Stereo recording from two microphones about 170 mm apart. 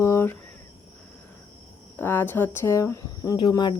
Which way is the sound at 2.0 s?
10° left (ahead or behind).